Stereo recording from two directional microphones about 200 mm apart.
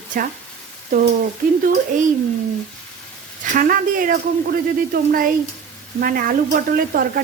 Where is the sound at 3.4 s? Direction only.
45° right (ahead or behind).